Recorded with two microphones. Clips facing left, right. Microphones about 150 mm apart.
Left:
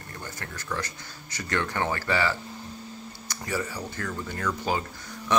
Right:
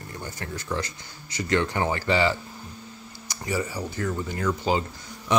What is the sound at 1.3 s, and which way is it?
Speech, 15° right (ahead or behind).